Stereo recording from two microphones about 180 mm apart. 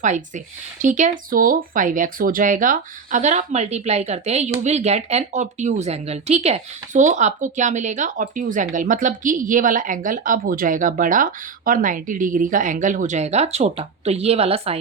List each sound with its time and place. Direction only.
0.0 s speech: 45° right (ahead or behind)